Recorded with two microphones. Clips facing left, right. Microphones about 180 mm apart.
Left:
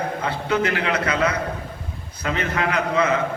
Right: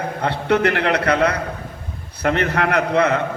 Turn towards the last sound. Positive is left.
turn(degrees=-65)  # may be behind; listen again after turning